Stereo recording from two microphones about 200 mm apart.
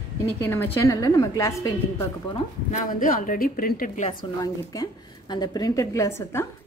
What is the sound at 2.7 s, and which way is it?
A woman's voice, 40° left (ahead or behind).